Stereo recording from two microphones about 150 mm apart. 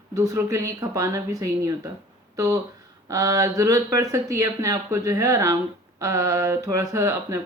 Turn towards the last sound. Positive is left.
turn(degrees=-20)  # may be behind; listen again after turning